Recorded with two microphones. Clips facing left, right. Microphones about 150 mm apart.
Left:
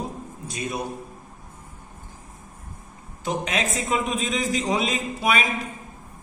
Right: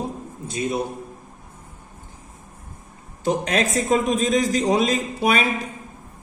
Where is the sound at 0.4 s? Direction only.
25° right (ahead or behind).